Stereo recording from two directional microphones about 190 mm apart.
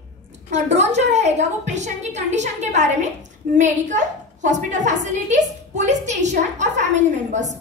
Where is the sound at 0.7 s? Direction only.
35° right (ahead or behind).